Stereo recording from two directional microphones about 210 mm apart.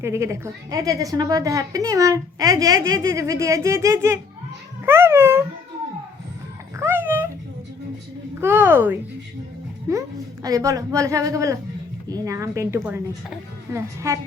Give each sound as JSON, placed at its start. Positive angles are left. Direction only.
{"t": 0.0, "sound": "a woman's voice", "side_deg": -15}
{"t": 4.9, "sound": "dog", "side_deg": -10}
{"t": 6.7, "sound": "a sound", "side_deg": -10}
{"t": 8.4, "sound": "a woman's voice", "side_deg": -10}
{"t": 10.4, "sound": "a woman's voice", "side_deg": -15}